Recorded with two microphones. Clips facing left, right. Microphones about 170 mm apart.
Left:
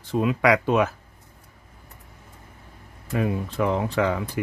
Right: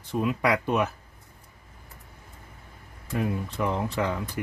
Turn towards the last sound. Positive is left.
turn(degrees=90)